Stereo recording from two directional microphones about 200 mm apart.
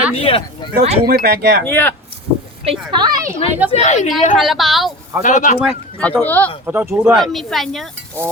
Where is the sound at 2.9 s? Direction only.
20° right (ahead or behind).